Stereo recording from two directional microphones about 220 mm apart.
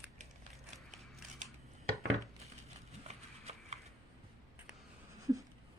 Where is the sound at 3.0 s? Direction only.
30° right (ahead or behind).